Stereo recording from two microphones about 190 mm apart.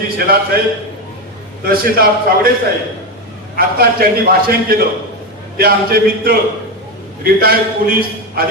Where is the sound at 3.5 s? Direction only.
50° right (ahead or behind).